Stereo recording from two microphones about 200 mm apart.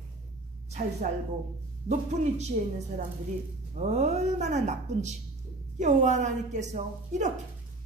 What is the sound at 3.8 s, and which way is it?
A woman's voice, 35° right (ahead or behind).